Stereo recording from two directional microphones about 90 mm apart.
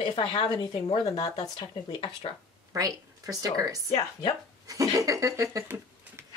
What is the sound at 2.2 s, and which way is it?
Speech, 90° left.